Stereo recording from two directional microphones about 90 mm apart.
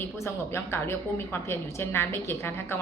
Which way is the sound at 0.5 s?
25° left (ahead or behind).